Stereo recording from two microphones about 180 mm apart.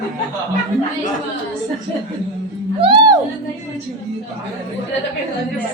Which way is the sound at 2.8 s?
25° right (ahead or behind).